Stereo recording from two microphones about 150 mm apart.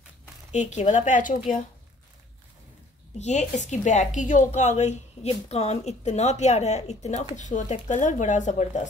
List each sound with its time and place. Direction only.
0.5 s speech: 50° left (ahead or behind)
3.2 s a woman's voice: 50° left (ahead or behind)